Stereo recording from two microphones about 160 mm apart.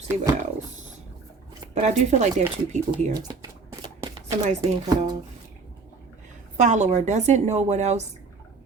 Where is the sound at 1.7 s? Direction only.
45° right (ahead or behind).